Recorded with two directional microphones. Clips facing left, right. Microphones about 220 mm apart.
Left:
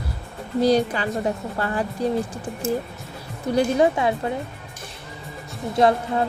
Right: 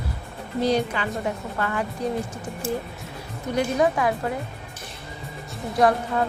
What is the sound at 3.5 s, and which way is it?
Speech, 25° left (ahead or behind).